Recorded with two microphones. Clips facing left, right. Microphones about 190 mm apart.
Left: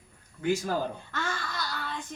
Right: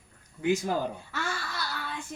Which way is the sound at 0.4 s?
20° right (ahead or behind).